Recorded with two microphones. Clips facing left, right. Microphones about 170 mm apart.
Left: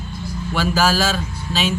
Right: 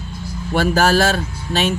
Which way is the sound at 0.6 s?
60° right (ahead or behind).